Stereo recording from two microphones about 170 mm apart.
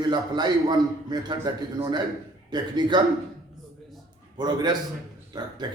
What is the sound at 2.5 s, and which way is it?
Speech, 25° right (ahead or behind).